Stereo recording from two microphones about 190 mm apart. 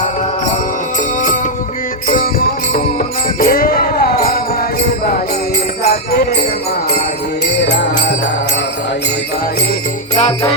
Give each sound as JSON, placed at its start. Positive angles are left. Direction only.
{"t": 2.0, "sound": "music", "side_deg": 50}
{"t": 5.8, "sound": "music", "side_deg": 55}
{"t": 7.6, "sound": "music", "side_deg": 65}
{"t": 10.2, "sound": "music", "side_deg": 35}